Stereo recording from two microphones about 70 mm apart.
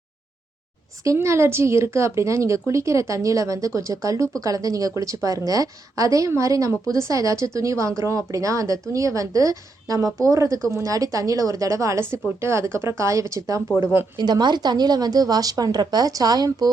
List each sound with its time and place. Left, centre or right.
1.0 s speech: right
13.7 s speech: right
14.2 s a woman's voice: right